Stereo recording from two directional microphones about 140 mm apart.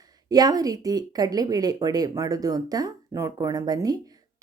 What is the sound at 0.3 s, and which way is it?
Speech, 30° right (ahead or behind).